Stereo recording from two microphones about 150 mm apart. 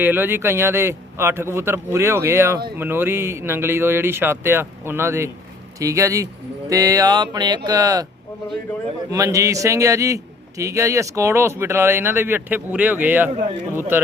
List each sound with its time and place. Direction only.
0.0 s speech: 15° right (ahead or behind)
9.0 s speech: 20° right (ahead or behind)